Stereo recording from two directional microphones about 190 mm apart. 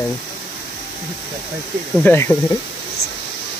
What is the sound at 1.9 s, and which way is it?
Speech, 10° left (ahead or behind).